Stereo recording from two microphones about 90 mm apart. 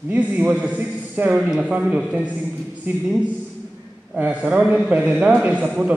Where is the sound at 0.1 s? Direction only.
20° right (ahead or behind).